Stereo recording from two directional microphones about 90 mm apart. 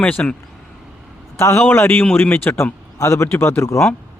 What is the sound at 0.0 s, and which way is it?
Speech, 15° left (ahead or behind).